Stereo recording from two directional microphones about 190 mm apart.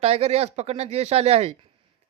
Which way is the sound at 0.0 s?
35° right (ahead or behind).